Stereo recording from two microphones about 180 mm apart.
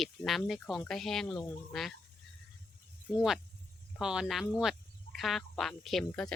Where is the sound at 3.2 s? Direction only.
Centre (ahead or behind).